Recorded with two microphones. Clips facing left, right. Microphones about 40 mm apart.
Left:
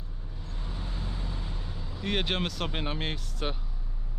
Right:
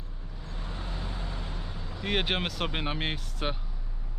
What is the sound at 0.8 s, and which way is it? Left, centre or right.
Vehicle, right.